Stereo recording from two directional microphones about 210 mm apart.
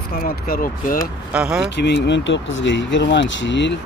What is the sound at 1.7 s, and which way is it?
Speech, 55° left (ahead or behind).